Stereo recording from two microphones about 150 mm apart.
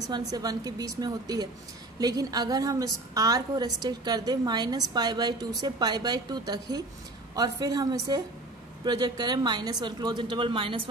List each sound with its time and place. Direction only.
0.0 s a woman's voice: 25° right (ahead or behind)